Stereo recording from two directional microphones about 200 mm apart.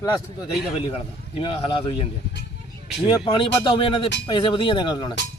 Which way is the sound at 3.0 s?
25° left (ahead or behind).